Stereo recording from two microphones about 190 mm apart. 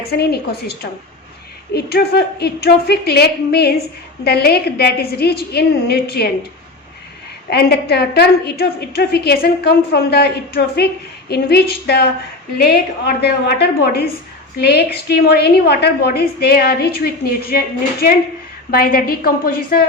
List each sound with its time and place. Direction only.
0.0 s a woman's voice: 55° left (ahead or behind)
7.5 s a woman's voice: 55° left (ahead or behind)
18.7 s a woman's voice: 50° left (ahead or behind)